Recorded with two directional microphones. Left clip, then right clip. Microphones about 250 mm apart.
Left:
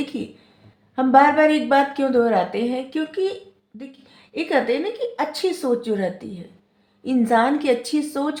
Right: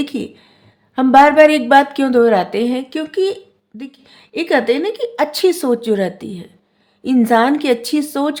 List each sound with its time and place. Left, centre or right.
0.0 s a woman's voice: right